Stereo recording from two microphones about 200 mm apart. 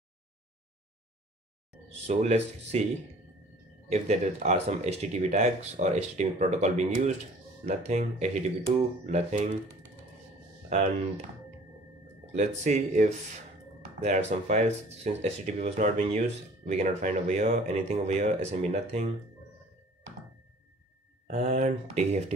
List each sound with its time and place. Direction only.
2.0 s speech: 35° right (ahead or behind)
3.9 s speech: 30° right (ahead or behind)
10.7 s speech: 35° right (ahead or behind)
12.3 s speech: 35° right (ahead or behind)
21.3 s speech: 35° right (ahead or behind)